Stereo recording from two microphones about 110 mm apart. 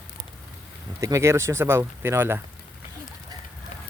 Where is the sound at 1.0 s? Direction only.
25° right (ahead or behind).